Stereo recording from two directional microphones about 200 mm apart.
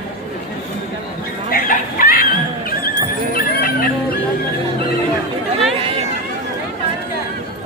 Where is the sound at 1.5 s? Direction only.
45° left (ahead or behind).